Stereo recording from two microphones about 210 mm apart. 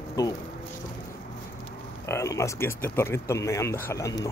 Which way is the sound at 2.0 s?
15° left (ahead or behind).